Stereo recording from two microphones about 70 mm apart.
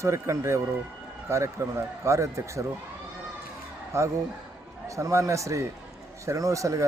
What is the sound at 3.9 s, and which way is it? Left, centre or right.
Speech, right.